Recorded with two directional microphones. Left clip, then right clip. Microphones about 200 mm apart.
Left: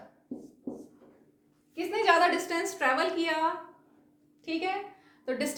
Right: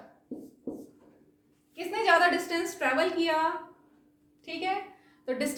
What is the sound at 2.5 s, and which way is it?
Speech, 35° left (ahead or behind).